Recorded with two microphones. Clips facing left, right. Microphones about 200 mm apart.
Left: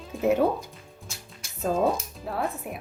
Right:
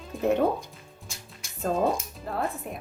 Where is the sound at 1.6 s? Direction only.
Centre (ahead or behind).